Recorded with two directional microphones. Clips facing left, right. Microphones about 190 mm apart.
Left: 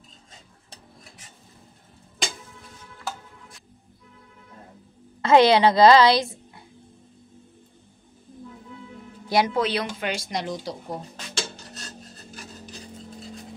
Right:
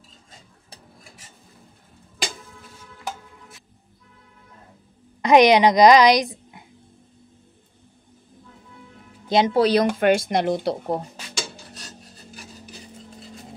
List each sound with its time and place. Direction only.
5.2 s a woman's voice: 15° right (ahead or behind)
9.3 s a woman's voice: 25° right (ahead or behind)
9.6 s speech: 40° right (ahead or behind)
9.8 s speech: 55° right (ahead or behind)
11.1 s filing: 10° right (ahead or behind)